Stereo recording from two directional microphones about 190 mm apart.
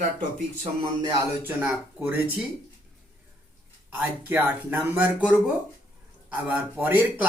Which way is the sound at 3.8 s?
10° right (ahead or behind).